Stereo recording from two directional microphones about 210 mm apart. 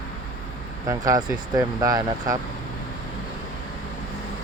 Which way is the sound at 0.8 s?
15° right (ahead or behind).